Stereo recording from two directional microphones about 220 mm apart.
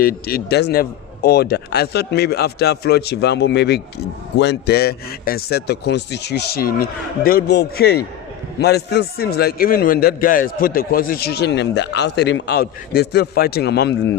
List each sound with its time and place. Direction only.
0.0 s a man's voice: 40° left (ahead or behind)